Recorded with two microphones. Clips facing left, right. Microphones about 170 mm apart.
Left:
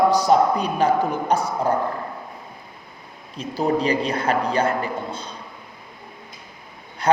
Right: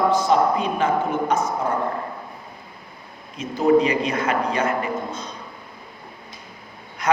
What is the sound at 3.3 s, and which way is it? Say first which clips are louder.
A man's voice: right 5 dB; 35° left (ahead or behind).